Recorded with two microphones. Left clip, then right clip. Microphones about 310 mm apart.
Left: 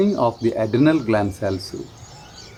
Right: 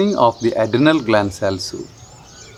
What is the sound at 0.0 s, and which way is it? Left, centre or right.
Speech, right.